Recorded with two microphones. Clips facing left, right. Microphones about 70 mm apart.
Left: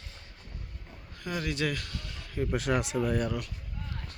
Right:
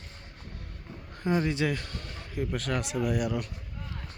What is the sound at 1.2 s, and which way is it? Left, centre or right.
Speech, right.